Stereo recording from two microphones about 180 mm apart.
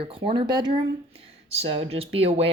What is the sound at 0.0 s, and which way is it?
Speech, 30° right (ahead or behind).